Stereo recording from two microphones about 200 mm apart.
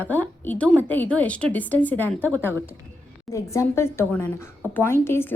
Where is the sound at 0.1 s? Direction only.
10° left (ahead or behind).